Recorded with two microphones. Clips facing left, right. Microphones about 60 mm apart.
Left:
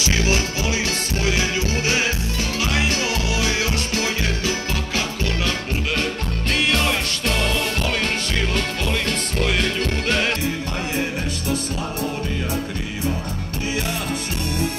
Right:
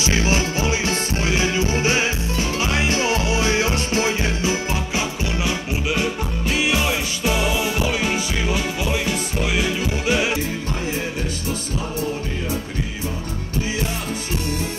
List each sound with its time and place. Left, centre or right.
0.0 s music: right; by 10.3 s centre